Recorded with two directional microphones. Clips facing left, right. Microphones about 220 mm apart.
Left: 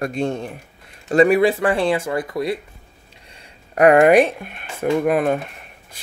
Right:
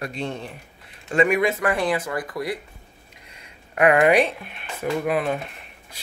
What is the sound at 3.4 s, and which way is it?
Speech, 40° left (ahead or behind).